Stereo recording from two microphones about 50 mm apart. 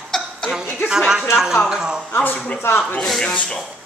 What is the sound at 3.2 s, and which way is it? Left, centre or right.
Speech, left.